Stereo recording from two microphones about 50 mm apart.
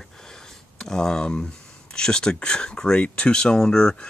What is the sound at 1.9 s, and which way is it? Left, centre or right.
Speech, centre.